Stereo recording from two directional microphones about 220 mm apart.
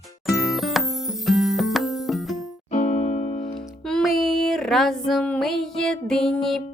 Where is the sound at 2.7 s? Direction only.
35° left (ahead or behind).